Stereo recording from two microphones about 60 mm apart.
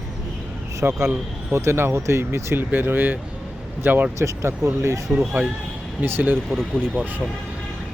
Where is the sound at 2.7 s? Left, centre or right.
Right.